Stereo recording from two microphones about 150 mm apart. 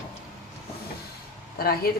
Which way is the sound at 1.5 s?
85° left.